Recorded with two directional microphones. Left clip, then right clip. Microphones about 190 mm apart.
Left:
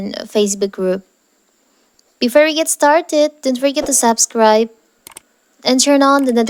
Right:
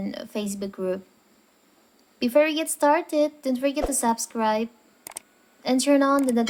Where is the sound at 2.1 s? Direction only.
45° left (ahead or behind).